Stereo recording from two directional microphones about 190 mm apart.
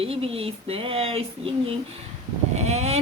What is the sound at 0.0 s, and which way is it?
Speech, 30° right (ahead or behind).